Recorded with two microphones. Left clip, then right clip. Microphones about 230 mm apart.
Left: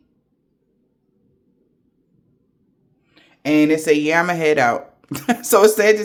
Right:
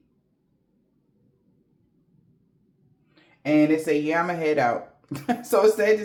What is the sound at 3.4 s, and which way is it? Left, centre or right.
Speech, left.